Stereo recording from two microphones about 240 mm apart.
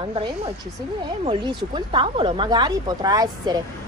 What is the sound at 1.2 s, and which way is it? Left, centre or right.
A woman's voice, right.